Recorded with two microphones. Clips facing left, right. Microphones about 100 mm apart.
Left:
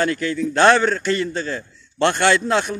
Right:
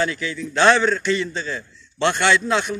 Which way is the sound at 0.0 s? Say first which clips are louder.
Left 4 dB; 50° left (ahead or behind).